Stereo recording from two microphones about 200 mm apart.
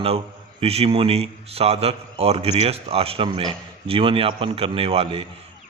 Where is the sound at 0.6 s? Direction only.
30° right (ahead or behind).